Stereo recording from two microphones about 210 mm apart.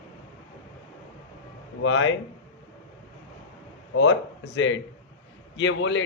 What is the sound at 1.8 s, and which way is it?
Speech, 65° left (ahead or behind).